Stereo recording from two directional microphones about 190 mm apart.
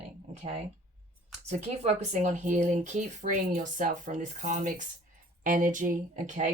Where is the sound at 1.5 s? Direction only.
40° right (ahead or behind).